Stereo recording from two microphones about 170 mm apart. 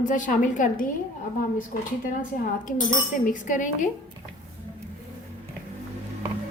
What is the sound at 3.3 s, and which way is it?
Speech, 50° left (ahead or behind).